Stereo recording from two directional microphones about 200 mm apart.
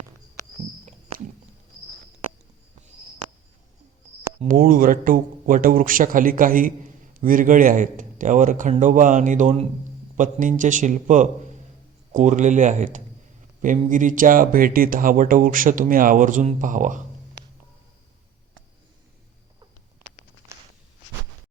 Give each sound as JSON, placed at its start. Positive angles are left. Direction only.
{"t": 4.4, "sound": "speech", "side_deg": -45}
{"t": 20.5, "sound": "walk", "side_deg": -15}